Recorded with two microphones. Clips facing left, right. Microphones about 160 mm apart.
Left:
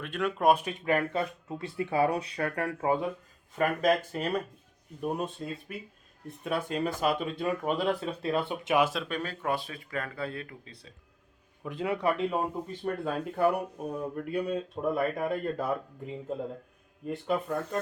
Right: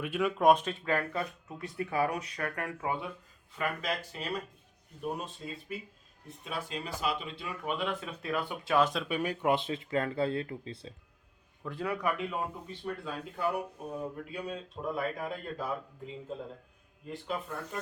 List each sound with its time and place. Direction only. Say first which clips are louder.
0.0 s speech: even; 5° right (ahead or behind); by 3.1 s 35° left (ahead or behind)
3.5 s speech: left 8 dB; 45° left (ahead or behind); by 8.8 s 25° left (ahead or behind)
8.8 s speech: right 1 dB; centre (ahead or behind)
9.0 s speech: right 3 dB; 10° right (ahead or behind); by 10.9 s 30° right (ahead or behind)
11.6 s speech: left 4 dB; 20° left (ahead or behind)
12.6 s speech: left 6 dB; 50° left (ahead or behind)